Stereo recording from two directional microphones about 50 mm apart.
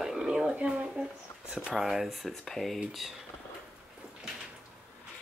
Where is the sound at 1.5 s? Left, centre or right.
Centre.